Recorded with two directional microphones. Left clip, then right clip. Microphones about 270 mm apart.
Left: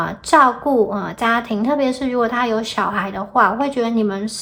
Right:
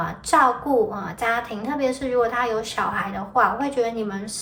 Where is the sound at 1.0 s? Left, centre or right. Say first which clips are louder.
Left 5 dB; centre.